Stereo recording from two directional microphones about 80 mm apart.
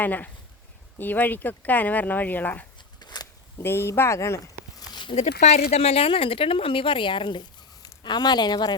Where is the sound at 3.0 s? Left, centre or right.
Left.